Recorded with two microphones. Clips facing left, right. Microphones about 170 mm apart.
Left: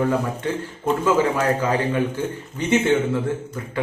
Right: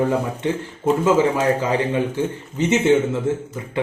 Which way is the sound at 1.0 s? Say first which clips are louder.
Right 2 dB; 20° right (ahead or behind).